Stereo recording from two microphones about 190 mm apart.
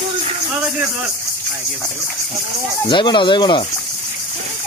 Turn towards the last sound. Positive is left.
turn(degrees=25)  # may be behind; listen again after turning